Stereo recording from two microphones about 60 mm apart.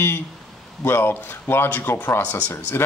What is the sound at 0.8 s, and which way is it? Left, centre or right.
Speech, left.